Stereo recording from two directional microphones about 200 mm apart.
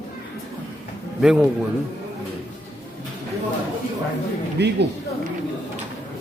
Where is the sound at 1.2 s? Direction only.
5° right (ahead or behind).